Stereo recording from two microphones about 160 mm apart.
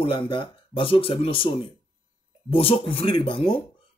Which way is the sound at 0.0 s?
35° left (ahead or behind).